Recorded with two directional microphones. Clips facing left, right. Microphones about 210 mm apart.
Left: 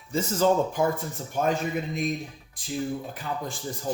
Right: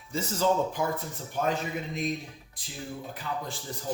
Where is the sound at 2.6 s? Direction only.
50° left (ahead or behind).